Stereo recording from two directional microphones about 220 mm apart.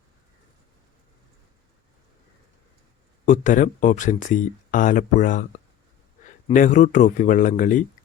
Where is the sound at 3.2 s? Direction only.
35° left (ahead or behind).